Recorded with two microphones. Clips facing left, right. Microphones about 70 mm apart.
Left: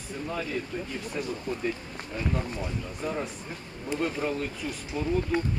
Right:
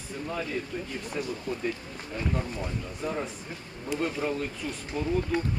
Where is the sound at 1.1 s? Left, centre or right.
Centre.